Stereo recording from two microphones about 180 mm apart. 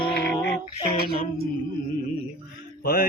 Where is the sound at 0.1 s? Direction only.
65° left (ahead or behind).